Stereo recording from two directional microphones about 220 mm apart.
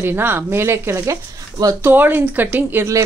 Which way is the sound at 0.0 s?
10° right (ahead or behind).